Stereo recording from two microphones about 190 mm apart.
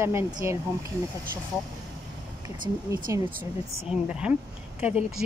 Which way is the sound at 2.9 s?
15° right (ahead or behind).